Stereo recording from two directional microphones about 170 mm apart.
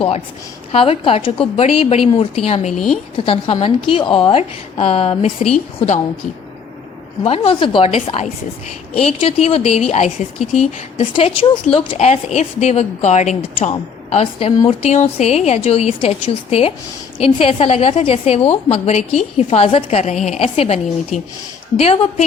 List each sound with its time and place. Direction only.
0.7 s a woman's voice: 35° left (ahead or behind)
2.7 s a woman's voice: centre (ahead or behind)
3.2 s a woman's voice: 35° left (ahead or behind)
7.3 s a woman's voice: 35° left (ahead or behind)